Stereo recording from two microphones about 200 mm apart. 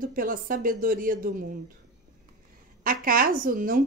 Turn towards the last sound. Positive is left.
turn(degrees=-45)  # may be behind; listen again after turning